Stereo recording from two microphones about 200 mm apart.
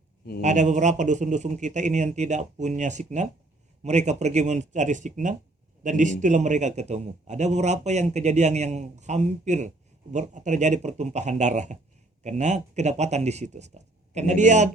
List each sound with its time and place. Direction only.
0.4 s a man's voice: 35° right (ahead or behind)